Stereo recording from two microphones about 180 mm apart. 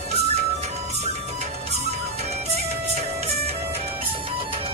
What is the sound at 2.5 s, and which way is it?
Music, 35° right (ahead or behind).